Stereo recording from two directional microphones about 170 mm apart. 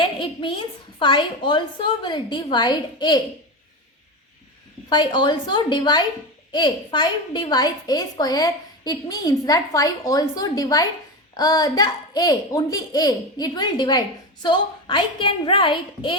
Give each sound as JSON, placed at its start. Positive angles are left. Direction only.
{"t": 0.0, "sound": "a sound", "side_deg": 30}
{"t": 0.9, "sound": "a woman's voice", "side_deg": 30}
{"t": 4.9, "sound": "a woman's voice", "side_deg": 25}